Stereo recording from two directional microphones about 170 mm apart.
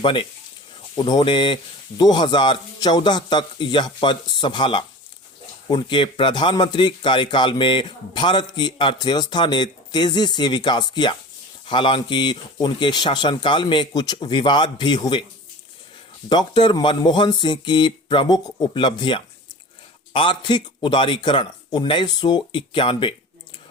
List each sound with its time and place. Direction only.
0.0 s a man's voice: 30° left (ahead or behind)
16.3 s a man's voice: 25° left (ahead or behind)